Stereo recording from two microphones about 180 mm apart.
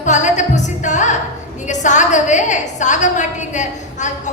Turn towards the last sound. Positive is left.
turn(degrees=40)  # may be behind; listen again after turning